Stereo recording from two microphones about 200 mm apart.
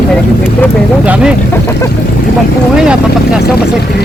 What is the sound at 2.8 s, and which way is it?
Speech, 5° right (ahead or behind).